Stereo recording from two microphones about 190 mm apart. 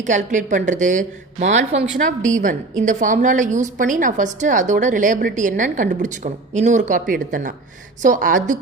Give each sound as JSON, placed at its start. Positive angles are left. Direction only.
{"t": 0.0, "sound": "a woman's voice", "side_deg": -40}